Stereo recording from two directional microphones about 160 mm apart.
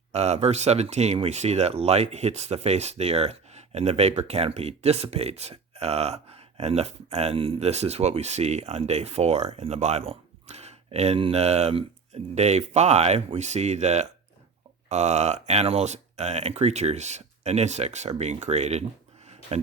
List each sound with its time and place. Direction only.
0.1 s speech: 45° right (ahead or behind)